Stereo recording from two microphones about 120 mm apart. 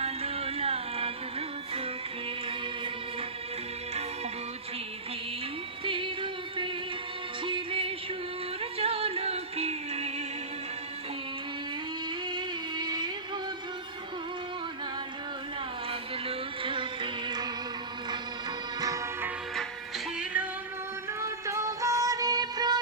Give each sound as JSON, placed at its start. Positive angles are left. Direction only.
{"t": 0.0, "sound": "music", "side_deg": -55}
{"t": 5.8, "sound": "music", "side_deg": -45}
{"t": 12.3, "sound": "a sound", "side_deg": -40}
{"t": 15.9, "sound": "music", "side_deg": -50}
{"t": 18.8, "sound": "music", "side_deg": -30}
{"t": 20.1, "sound": "music", "side_deg": -10}
{"t": 21.1, "sound": "music", "side_deg": -25}